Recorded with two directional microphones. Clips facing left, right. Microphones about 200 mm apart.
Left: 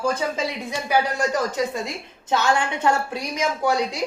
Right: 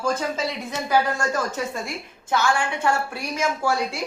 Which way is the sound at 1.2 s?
15° left (ahead or behind).